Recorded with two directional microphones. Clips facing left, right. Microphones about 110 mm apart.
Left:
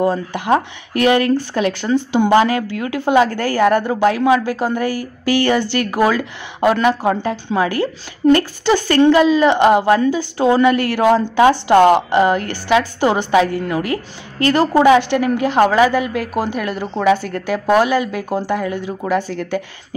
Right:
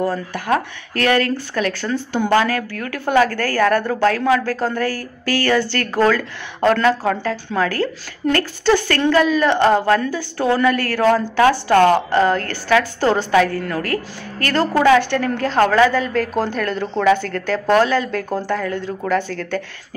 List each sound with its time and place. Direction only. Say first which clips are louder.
0.0 s speech: left 4 dB; 20° left (ahead or behind)